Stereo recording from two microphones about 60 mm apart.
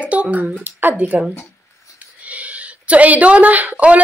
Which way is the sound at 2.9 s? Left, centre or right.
Right.